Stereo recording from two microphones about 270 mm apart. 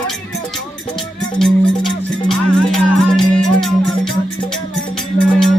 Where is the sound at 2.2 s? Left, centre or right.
Centre.